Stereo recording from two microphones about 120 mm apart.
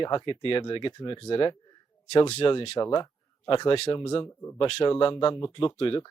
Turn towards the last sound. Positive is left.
turn(degrees=45)  # may be behind; listen again after turning